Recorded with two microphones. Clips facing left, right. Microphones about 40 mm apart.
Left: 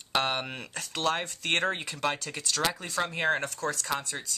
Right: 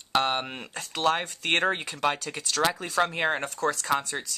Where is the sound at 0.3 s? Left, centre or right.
Centre.